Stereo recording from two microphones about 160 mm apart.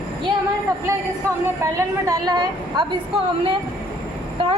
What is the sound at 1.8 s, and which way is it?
A woman's voice, 20° right (ahead or behind).